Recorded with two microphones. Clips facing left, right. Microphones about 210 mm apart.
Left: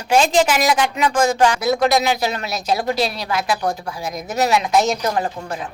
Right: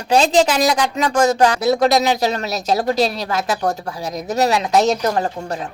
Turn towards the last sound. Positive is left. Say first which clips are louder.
# right 2 dB
turn(degrees=-40)  # may be behind; listen again after turning